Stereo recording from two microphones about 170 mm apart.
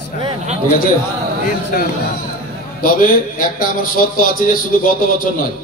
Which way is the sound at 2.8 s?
55° left (ahead or behind).